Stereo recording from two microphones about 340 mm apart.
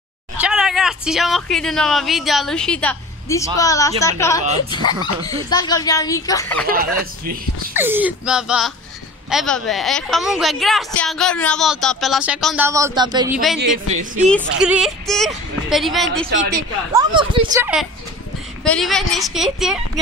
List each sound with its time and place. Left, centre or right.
0.4 s a woman's voice: centre
7.7 s a woman's voice: centre
14.3 s a woman's voice: centre
16.5 s speech: centre
18.6 s a woman's voice: centre